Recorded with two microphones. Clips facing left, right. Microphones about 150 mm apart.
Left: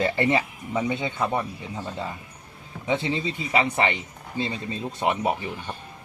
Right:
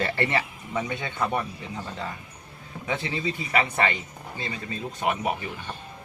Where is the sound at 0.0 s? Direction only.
15° left (ahead or behind).